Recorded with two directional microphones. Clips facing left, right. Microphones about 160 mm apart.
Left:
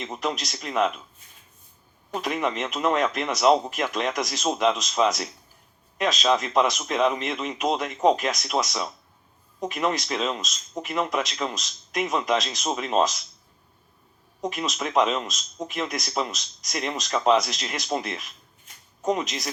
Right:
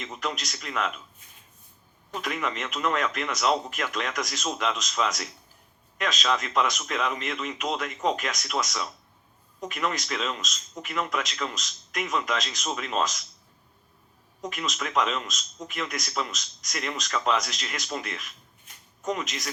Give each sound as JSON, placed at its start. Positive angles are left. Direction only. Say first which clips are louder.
{"t": 0.0, "sound": "speech", "louder": "left 4 dB", "side_deg": 35}
{"t": 2.1, "sound": "speech", "louder": "left 4 dB", "side_deg": 35}
{"t": 14.4, "sound": "speech", "louder": "left 4 dB", "side_deg": 35}